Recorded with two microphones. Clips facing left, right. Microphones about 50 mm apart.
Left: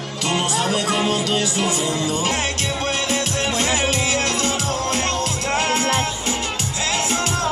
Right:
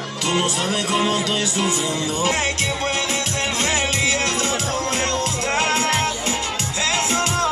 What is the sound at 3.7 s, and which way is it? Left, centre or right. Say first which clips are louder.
Music: even; right.